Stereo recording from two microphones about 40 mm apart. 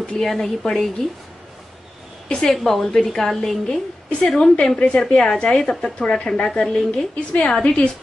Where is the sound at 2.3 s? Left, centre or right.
Centre.